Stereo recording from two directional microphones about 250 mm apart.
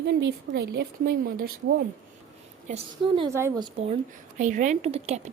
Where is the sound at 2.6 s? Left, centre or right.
Right.